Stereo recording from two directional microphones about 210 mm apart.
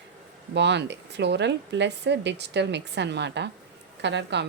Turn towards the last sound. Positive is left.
turn(degrees=-55)  # may be behind; listen again after turning